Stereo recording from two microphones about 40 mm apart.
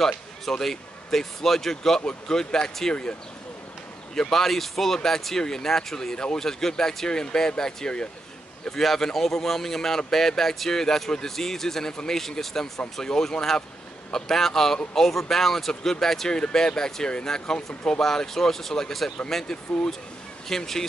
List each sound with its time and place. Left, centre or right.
0.0 s speech: centre
2.9 s speech: left
4.1 s speech: centre
8.6 s speech: centre
16.3 s speech: centre